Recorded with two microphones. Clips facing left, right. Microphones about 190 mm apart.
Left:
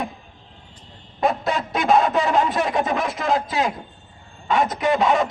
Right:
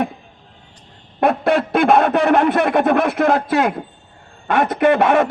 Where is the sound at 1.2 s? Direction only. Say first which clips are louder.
Right 6 dB; 60° right (ahead or behind).